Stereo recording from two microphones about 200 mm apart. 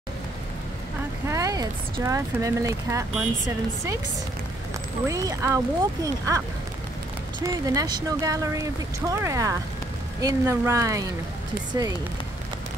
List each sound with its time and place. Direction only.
1.2 s speech: 15° right (ahead or behind)
5.0 s speech: 15° right (ahead or behind)